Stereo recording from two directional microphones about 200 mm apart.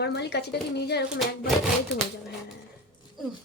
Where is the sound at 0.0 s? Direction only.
55° left (ahead or behind).